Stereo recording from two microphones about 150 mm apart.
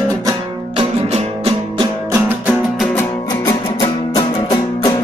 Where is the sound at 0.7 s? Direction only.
35° right (ahead or behind).